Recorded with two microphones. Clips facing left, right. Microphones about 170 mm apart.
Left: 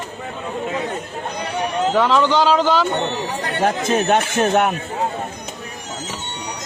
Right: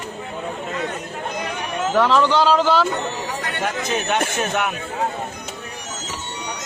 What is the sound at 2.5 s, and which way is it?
Speech, 5° right (ahead or behind).